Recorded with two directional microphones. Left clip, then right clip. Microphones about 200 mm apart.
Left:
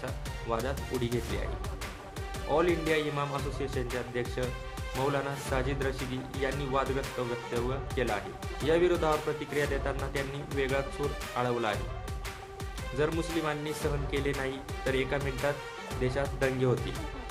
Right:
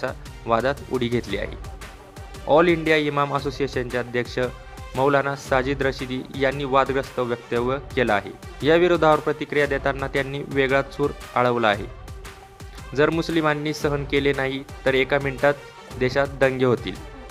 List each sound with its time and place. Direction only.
0.0 s speech: 35° right (ahead or behind)
2.5 s speech: 40° right (ahead or behind)
13.0 s speech: 40° right (ahead or behind)